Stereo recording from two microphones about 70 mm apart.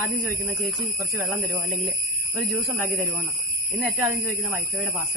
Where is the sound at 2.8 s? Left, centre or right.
Right.